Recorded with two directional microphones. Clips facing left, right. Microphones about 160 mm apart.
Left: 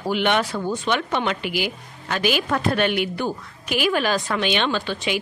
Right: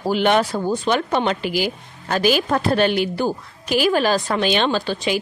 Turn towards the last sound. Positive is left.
turn(degrees=-35)  # may be behind; listen again after turning